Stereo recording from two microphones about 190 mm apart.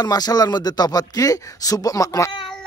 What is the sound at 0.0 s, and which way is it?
Speech, 20° left (ahead or behind).